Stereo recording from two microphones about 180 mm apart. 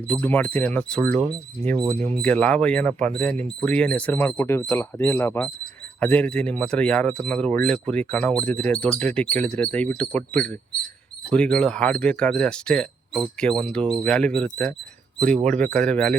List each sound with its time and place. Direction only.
0.1 s speech: 10° left (ahead or behind)